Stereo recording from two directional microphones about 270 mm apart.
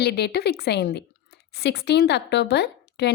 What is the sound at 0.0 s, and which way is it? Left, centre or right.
A woman's voice, left.